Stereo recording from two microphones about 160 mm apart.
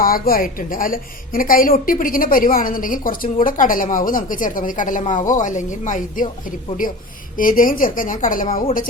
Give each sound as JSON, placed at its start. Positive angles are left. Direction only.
{"t": 0.0, "sound": "a woman's voice", "side_deg": 65}
{"t": 7.3, "sound": "a woman's voice", "side_deg": 60}